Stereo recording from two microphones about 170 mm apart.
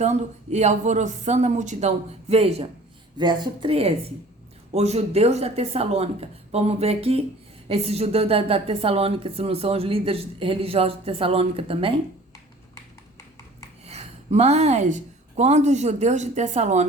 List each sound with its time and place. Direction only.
0.0 s a woman's voice: 40° right (ahead or behind)
3.2 s a woman's voice: 25° right (ahead or behind)
13.8 s a woman's voice: 40° right (ahead or behind)